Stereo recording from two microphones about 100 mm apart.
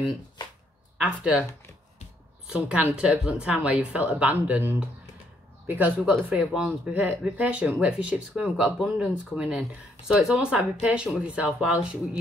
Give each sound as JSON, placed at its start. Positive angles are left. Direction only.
{"t": 0.9, "sound": "speech", "side_deg": -5}
{"t": 2.4, "sound": "speech", "side_deg": -10}